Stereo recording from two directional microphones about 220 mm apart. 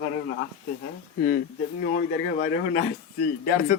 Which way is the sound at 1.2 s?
45° left (ahead or behind).